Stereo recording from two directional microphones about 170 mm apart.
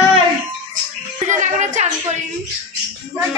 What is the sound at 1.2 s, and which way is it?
Music, 45° right (ahead or behind).